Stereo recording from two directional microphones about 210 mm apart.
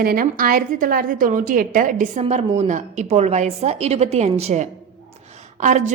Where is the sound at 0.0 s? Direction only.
45° right (ahead or behind).